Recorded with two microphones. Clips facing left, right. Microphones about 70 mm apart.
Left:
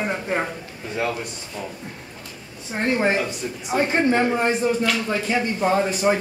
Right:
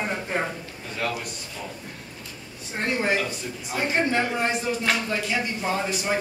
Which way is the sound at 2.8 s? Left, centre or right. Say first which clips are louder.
Left 4 dB; left.